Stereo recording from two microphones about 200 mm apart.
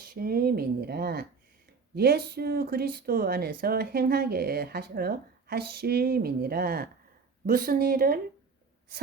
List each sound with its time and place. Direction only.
0.0 s a woman's voice: 45° right (ahead or behind)